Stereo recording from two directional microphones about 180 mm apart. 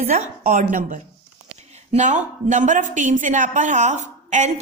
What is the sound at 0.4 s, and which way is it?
A woman's voice, 45° right (ahead or behind).